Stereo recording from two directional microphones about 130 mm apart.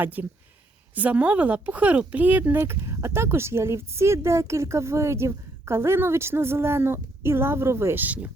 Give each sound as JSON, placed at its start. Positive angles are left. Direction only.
{"t": 0.0, "sound": "speech", "side_deg": -15}